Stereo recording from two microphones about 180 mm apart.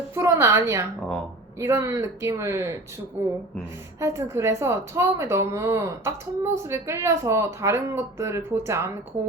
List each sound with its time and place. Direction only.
0.1 s a woman's voice: 15° right (ahead or behind)
4.0 s speech: 15° right (ahead or behind)